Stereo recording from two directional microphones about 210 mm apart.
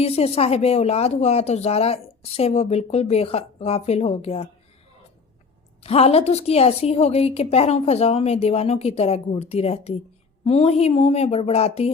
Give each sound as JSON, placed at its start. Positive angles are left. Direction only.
{"t": 0.0, "sound": "speech", "side_deg": 30}
{"t": 5.8, "sound": "speech", "side_deg": 30}